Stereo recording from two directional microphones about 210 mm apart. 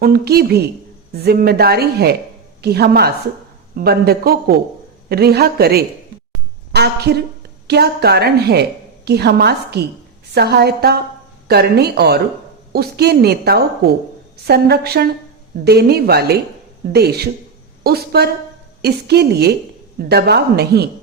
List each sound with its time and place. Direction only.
0.0 s a woman's voice: 45° right (ahead or behind)